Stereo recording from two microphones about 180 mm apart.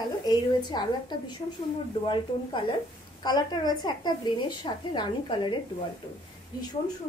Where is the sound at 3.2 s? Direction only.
25° left (ahead or behind).